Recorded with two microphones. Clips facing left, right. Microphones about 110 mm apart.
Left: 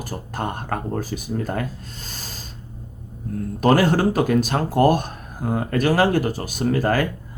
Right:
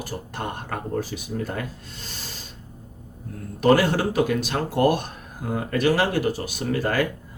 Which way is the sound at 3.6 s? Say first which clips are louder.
Left 2 dB; 45° left (ahead or behind).